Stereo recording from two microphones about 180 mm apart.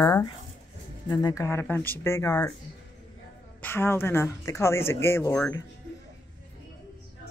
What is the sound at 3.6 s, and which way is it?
Speech, 10° left (ahead or behind).